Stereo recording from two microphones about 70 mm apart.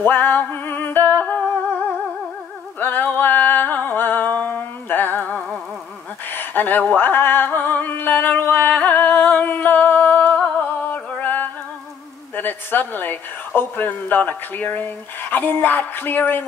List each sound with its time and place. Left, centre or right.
0.0 s music: left
2.8 s music: left
6.3 s a sound: left
12.4 s a woman's voice: left